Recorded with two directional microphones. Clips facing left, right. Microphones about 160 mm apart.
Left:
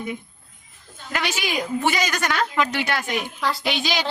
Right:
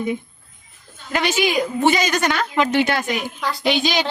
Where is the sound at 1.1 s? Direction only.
25° right (ahead or behind).